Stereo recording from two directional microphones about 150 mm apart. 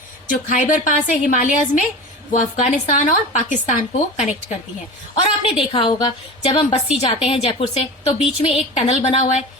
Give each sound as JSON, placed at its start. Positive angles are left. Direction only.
{"t": 0.3, "sound": "a woman's voice", "side_deg": 60}
{"t": 5.1, "sound": "a woman's voice", "side_deg": 35}